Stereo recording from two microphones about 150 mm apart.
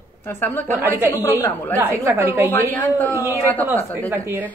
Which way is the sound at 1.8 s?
15° right (ahead or behind).